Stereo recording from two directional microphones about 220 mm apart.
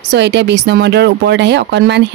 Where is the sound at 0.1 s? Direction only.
50° right (ahead or behind).